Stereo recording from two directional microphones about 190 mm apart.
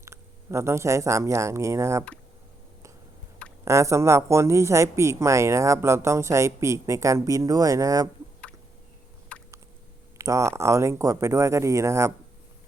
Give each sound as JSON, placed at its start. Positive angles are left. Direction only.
{"t": 0.0, "sound": "speech", "side_deg": -15}
{"t": 3.6, "sound": "speech", "side_deg": -15}
{"t": 9.3, "sound": "a sound", "side_deg": 5}
{"t": 10.2, "sound": "speech", "side_deg": -15}